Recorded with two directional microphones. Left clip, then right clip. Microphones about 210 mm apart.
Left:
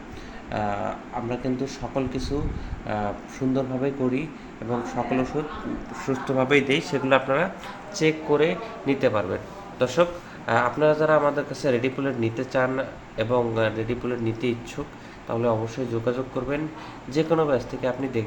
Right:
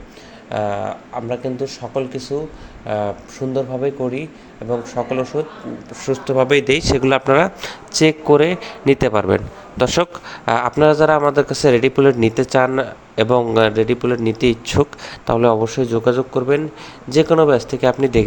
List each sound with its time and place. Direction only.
0.5 s speech: 40° right (ahead or behind)
3.5 s speech: 40° right (ahead or behind)